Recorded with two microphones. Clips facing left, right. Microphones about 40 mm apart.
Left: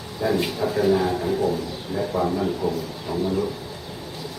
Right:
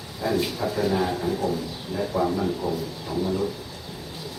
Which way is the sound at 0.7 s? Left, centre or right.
Centre.